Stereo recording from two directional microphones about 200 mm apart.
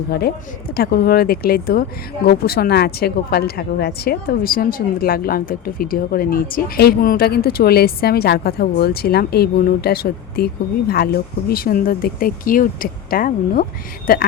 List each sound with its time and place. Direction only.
0.1 s speech: 55° left (ahead or behind)